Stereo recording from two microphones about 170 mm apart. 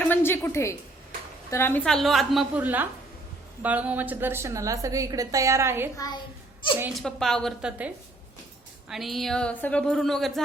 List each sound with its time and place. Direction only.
0.0 s a sound: 10° left (ahead or behind)
1.5 s a woman's voice: 15° left (ahead or behind); by 5.9 s 15° right (ahead or behind)
6.9 s a woman's voice: centre (ahead or behind)
8.9 s a woman's voice: centre (ahead or behind)